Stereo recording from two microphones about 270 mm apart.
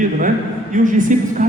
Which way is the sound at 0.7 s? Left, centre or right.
Right.